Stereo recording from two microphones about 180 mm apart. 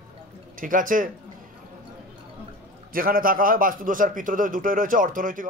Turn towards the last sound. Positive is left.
turn(degrees=-50)  # may be behind; listen again after turning